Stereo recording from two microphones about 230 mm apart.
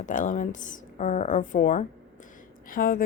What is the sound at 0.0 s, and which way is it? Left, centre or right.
Speech, left.